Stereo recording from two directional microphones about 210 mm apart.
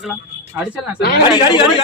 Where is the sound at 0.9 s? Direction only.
50° left (ahead or behind).